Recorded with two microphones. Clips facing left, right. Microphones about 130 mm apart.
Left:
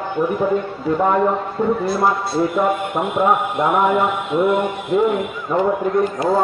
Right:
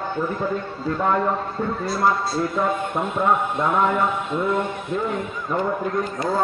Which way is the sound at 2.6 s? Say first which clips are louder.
Left 4 dB; 15° left (ahead or behind).